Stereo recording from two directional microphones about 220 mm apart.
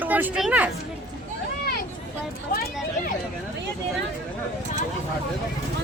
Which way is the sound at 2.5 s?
45° left (ahead or behind).